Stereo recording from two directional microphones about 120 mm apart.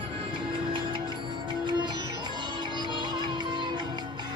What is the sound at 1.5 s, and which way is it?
Music, 40° right (ahead or behind).